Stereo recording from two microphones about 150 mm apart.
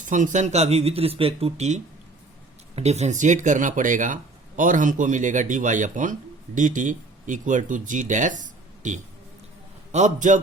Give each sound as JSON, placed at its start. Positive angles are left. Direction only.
{"t": 0.0, "sound": "speech", "side_deg": -55}